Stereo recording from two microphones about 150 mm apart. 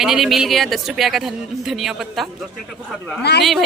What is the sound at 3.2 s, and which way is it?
Speech, 90° left.